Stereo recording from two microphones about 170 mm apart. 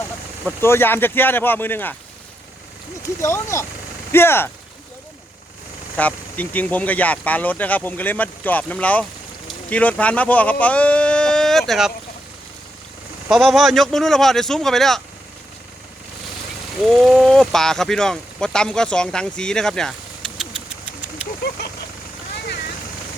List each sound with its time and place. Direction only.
0.6 s speech: 15° left (ahead or behind)
3.2 s speech: 15° left (ahead or behind)
6.0 s speech: 10° left (ahead or behind)
13.3 s speech: centre (ahead or behind)
16.8 s speech: 5° left (ahead or behind)
21.6 s vehicle: 80° left